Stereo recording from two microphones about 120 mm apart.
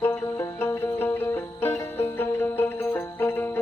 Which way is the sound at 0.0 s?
20° left (ahead or behind).